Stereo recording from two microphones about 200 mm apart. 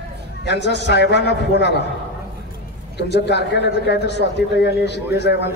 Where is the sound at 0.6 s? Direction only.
60° left (ahead or behind).